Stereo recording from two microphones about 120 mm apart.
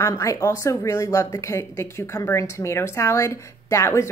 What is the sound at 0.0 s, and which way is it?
Speech, 25° left (ahead or behind).